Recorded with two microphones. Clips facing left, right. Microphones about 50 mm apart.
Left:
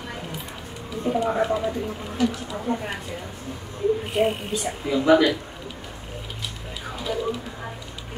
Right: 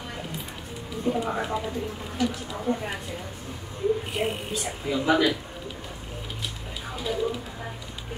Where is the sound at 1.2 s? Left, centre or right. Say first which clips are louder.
Left 6 dB; centre.